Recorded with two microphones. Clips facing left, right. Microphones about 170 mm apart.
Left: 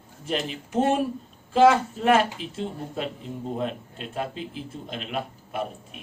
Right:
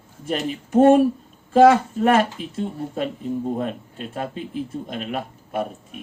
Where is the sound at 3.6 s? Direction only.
45° right (ahead or behind).